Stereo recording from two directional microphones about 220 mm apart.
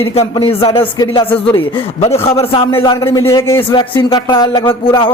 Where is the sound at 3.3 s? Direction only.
10° left (ahead or behind).